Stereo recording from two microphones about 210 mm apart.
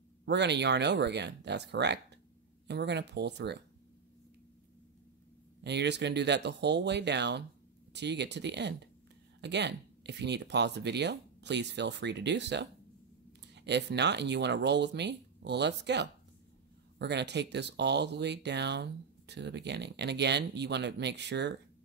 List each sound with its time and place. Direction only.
0.2 s speech: 55° right (ahead or behind)
5.6 s speech: 55° right (ahead or behind)